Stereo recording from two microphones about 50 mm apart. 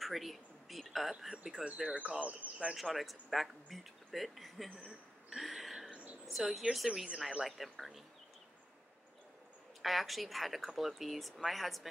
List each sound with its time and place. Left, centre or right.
0.0 s speech: centre
2.1 s speech: right
2.7 s speech: centre
5.3 s a sound: centre
5.9 s a sound: right
6.3 s speech: centre
9.8 s speech: centre